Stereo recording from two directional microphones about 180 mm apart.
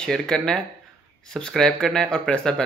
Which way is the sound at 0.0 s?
5° left (ahead or behind).